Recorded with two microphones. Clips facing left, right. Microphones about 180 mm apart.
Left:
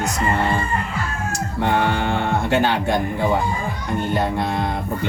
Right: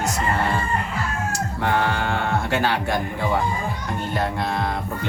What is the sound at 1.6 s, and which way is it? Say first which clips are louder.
Speech: left 3 dB; 20° left (ahead or behind).